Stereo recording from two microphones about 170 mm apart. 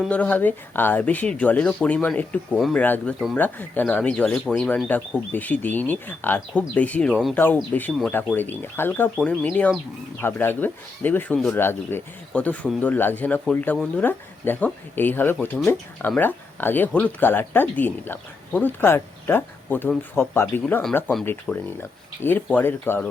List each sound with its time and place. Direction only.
0.0 s speech: 10° left (ahead or behind)